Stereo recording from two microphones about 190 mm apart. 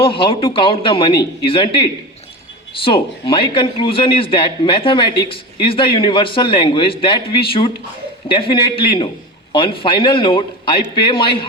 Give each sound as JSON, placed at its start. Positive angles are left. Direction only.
{"t": 0.0, "sound": "a man's voice", "side_deg": 30}